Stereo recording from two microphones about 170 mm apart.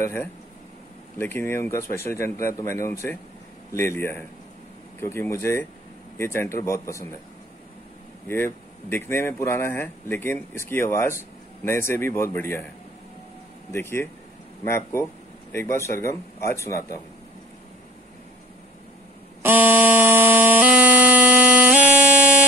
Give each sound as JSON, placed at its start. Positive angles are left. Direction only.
{"t": 0.0, "sound": "speech", "side_deg": 15}
{"t": 8.3, "sound": "speech", "side_deg": 15}
{"t": 13.7, "sound": "speech", "side_deg": 15}
{"t": 19.4, "sound": "music", "side_deg": -10}